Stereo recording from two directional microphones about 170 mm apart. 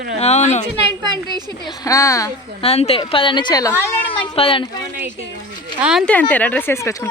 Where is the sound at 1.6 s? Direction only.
20° left (ahead or behind).